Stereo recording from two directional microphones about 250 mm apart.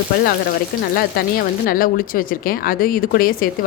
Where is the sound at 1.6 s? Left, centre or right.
Left.